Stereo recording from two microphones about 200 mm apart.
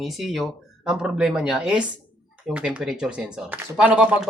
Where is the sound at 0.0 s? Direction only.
Centre (ahead or behind).